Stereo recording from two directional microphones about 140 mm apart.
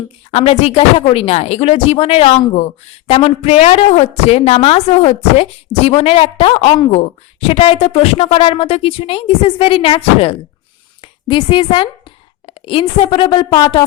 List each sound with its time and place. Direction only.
0.3 s a woman's voice: 45° left (ahead or behind)